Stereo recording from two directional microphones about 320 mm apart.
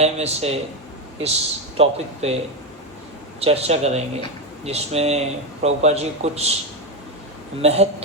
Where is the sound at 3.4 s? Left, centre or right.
Centre.